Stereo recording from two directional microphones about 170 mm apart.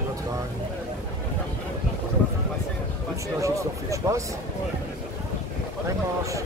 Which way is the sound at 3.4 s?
20° right (ahead or behind).